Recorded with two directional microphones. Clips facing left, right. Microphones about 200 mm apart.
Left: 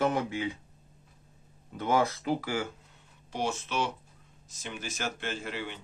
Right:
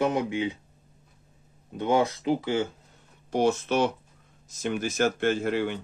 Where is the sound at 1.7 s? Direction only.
20° right (ahead or behind).